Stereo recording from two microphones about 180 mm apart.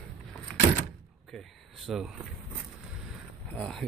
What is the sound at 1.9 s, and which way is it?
Speech, centre (ahead or behind).